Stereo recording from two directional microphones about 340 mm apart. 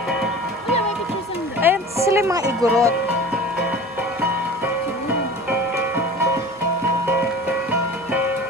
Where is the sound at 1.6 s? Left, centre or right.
Centre.